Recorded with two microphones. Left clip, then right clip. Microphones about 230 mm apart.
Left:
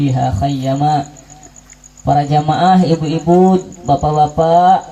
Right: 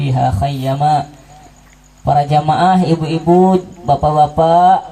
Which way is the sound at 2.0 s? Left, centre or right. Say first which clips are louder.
Right 1 dB; right.